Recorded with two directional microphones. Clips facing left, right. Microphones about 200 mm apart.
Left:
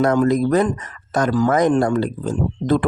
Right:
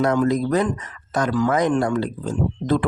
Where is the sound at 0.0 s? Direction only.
50° left (ahead or behind).